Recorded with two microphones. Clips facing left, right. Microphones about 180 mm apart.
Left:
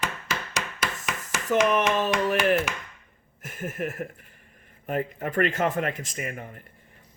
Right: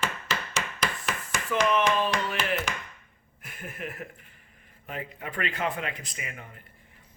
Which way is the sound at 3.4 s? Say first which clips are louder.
Left 7 dB; 45° left (ahead or behind).